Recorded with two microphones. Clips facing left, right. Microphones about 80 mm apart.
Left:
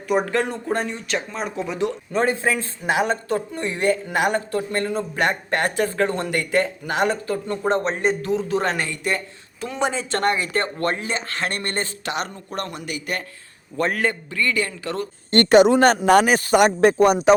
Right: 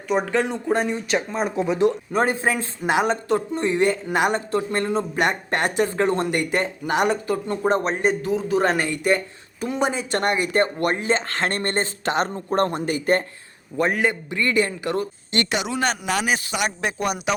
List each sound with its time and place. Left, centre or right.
0.1 s a man's voice: centre
7.6 s a man's voice: centre
11.0 s speech: right
13.7 s speech: centre
15.3 s speech: left